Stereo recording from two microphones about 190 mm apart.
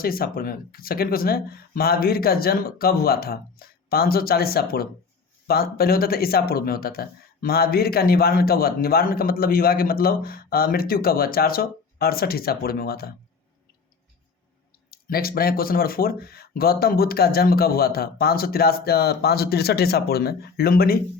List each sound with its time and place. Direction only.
0.0 s speech: 50° left (ahead or behind)
14.8 s speech: 55° left (ahead or behind)